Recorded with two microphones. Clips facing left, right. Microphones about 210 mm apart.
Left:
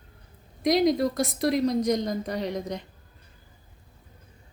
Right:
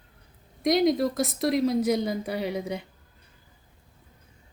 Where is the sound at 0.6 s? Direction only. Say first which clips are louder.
Even; centre (ahead or behind).